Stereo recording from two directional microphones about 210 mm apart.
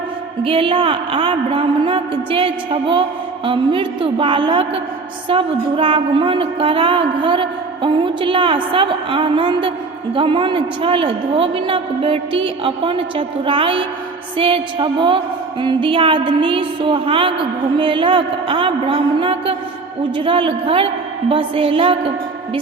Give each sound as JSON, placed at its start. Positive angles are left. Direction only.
{"t": 0.4, "sound": "music", "side_deg": -25}